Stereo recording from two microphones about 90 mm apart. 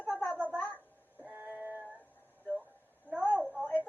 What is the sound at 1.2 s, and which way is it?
Synthetic singing, 15° right (ahead or behind).